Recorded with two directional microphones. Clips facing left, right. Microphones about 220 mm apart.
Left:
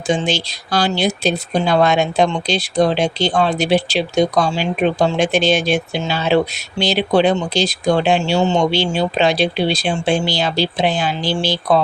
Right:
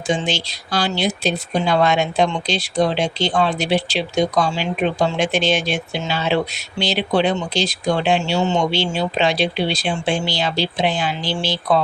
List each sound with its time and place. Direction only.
0.3 s speech: 40° left (ahead or behind)